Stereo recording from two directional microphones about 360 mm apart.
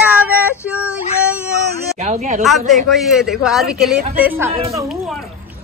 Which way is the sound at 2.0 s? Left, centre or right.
Centre.